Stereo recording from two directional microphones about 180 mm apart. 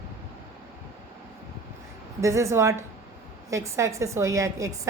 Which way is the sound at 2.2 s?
15° right (ahead or behind).